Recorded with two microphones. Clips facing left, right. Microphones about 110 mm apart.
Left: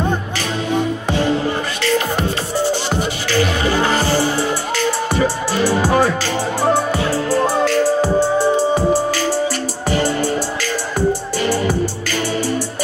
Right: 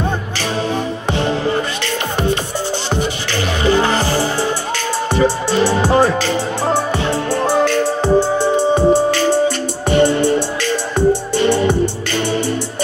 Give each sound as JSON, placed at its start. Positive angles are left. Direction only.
{"t": 5.2, "sound": "music", "side_deg": -25}
{"t": 8.5, "sound": "music", "side_deg": -25}